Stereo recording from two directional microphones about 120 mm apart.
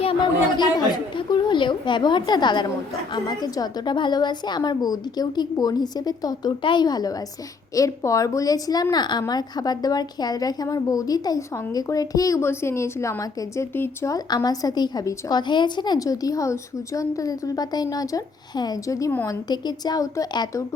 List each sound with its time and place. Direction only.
0.0 s speech: 50° left (ahead or behind)
0.6 s a woman's voice: 35° left (ahead or behind); by 14.1 s 20° left (ahead or behind)
14.1 s a woman's voice: 35° left (ahead or behind)
19.5 s a woman's voice: 35° left (ahead or behind)